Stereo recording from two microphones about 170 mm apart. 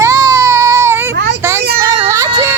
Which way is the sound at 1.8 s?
20° right (ahead or behind).